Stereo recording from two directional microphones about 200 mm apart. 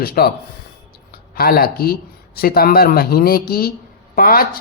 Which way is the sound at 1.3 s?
50° left (ahead or behind).